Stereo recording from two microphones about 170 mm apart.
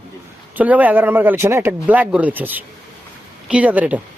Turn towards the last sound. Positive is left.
turn(degrees=-10)  # may be behind; listen again after turning